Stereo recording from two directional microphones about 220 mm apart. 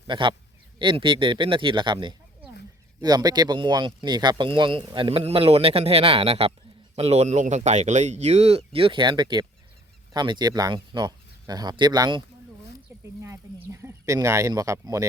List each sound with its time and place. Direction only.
0.1 s speech: 20° right (ahead or behind)
13.7 s speech: 10° right (ahead or behind)